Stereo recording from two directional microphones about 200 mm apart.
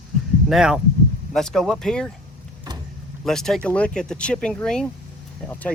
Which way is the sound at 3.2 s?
Centre (ahead or behind).